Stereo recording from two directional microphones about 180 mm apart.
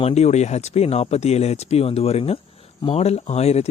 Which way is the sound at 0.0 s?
35° left (ahead or behind).